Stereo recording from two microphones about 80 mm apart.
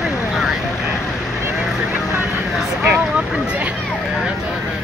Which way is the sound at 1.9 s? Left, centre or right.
Right.